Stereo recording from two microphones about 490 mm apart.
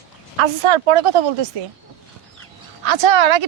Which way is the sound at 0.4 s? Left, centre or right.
Right.